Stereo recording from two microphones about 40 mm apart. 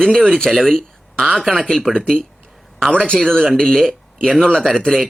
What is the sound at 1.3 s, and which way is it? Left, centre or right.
Speech, centre.